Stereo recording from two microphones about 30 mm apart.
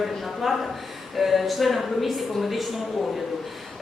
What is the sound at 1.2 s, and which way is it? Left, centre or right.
A woman's voice, centre.